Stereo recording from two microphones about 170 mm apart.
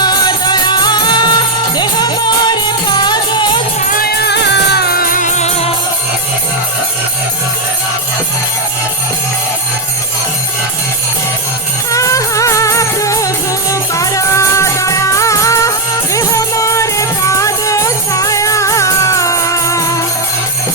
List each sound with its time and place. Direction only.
0.0 s music: 25° left (ahead or behind)
3.8 s music: 60° left (ahead or behind); by 5.7 s 40° left (ahead or behind)
11.9 s music: 20° left (ahead or behind)